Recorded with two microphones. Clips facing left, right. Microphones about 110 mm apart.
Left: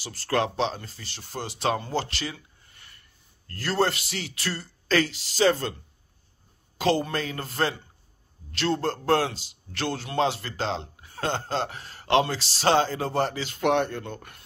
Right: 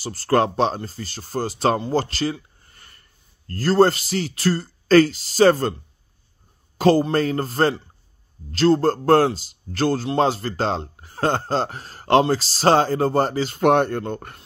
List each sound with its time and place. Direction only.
0.0 s a man's voice: 40° right (ahead or behind)
6.8 s a man's voice: 40° right (ahead or behind)